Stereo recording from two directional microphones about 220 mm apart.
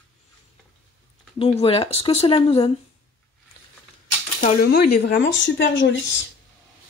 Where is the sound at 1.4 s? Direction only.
25° left (ahead or behind).